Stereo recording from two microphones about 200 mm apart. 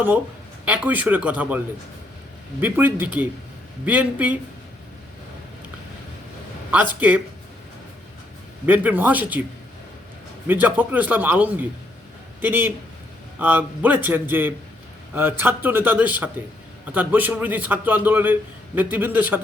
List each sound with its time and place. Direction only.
0.6 s a man's voice: 10° right (ahead or behind)
8.6 s a man's voice: 10° right (ahead or behind)
10.4 s a man's voice: 10° right (ahead or behind)